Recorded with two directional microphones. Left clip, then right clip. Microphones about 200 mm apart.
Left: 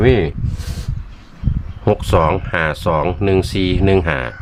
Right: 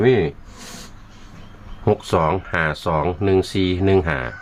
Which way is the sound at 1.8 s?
15° left (ahead or behind).